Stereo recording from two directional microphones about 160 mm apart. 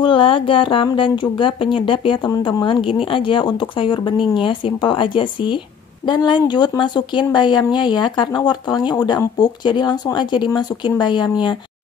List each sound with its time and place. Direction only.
0.0 s speech: 35° left (ahead or behind)